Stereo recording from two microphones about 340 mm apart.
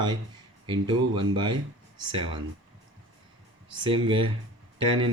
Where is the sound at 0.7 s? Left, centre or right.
Centre.